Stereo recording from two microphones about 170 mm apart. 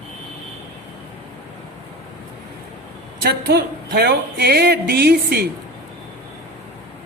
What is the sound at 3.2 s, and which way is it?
A woman's voice, 70° right (ahead or behind).